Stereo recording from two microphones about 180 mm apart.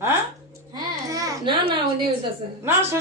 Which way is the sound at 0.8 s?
20° right (ahead or behind).